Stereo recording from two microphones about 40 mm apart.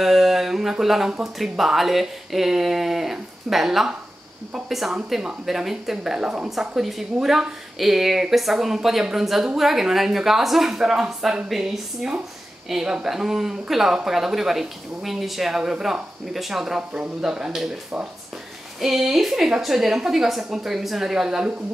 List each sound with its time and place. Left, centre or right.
0.0 s speech: centre
6.8 s speech: centre
18.8 s speech: centre